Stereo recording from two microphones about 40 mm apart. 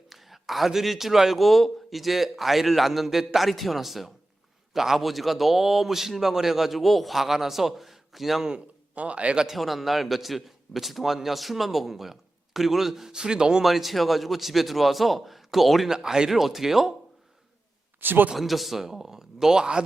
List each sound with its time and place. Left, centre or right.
0.1 s a man's voice: centre
9.0 s a man's voice: right
9.5 s a man's voice: centre
13.7 s a man's voice: centre
16.0 s a man's voice: centre
18.0 s a man's voice: right
18.3 s a man's voice: centre